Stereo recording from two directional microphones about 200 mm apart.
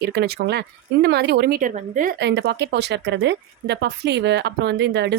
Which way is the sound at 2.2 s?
60° right (ahead or behind).